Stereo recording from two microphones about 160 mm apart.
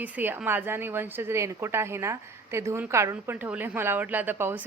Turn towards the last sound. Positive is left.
turn(degrees=-15)  # may be behind; listen again after turning